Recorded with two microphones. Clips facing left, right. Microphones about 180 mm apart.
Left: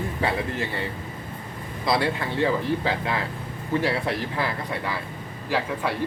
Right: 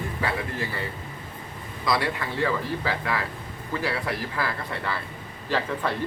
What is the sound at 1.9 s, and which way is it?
Speech, 25° left (ahead or behind).